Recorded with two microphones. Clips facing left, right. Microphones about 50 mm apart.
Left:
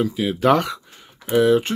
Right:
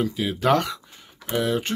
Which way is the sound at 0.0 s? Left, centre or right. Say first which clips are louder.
Left 4 dB; centre.